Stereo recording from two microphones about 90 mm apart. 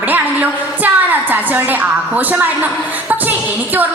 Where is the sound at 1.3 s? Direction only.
20° right (ahead or behind).